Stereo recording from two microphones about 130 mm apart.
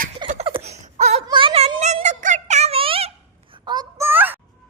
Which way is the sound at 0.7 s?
60° right (ahead or behind).